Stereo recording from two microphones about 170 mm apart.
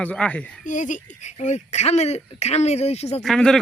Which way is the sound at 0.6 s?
50° left (ahead or behind).